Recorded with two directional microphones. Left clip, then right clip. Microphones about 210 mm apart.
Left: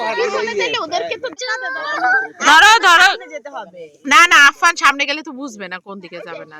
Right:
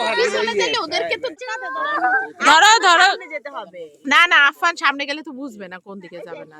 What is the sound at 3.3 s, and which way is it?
Speech, 50° left (ahead or behind).